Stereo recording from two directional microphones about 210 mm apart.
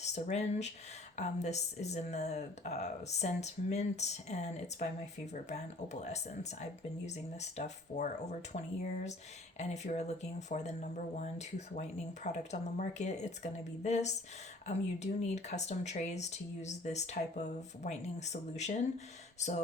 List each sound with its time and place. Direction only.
0.0 s speech: 35° left (ahead or behind)